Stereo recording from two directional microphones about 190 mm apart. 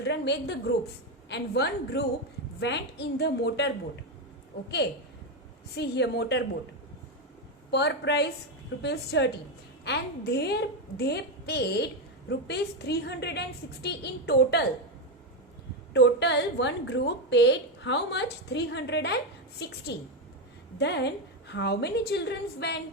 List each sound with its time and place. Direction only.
0.0 s a woman's voice: 65° left (ahead or behind)
5.7 s a woman's voice: 60° left (ahead or behind)
7.7 s a woman's voice: 60° left (ahead or behind)
15.9 s a woman's voice: 65° left (ahead or behind)